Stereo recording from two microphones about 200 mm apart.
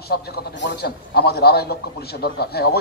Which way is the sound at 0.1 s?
55° left (ahead or behind).